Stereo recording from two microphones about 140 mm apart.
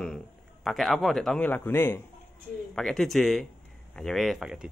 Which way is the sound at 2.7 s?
5° left (ahead or behind).